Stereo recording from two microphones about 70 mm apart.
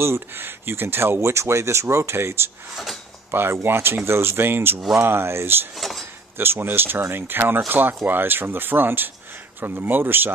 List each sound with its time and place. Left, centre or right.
0.0 s speech: right
2.7 s speech: centre
3.3 s speech: right
4.7 s speech: centre
5.0 s speech: right
5.8 s speech: centre
6.3 s speech: right